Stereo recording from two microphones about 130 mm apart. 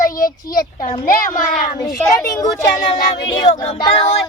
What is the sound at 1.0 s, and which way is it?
Speech, 90° left.